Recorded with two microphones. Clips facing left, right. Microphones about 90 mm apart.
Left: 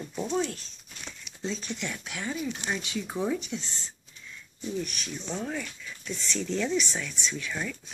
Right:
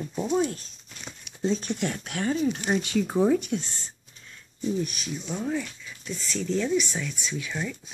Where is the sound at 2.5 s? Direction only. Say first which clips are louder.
Right 7 dB; 35° right (ahead or behind).